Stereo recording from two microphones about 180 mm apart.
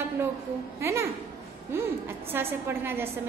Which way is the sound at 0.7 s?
15° right (ahead or behind).